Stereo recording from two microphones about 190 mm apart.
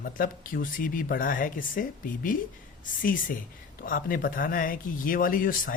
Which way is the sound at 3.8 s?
50° left (ahead or behind).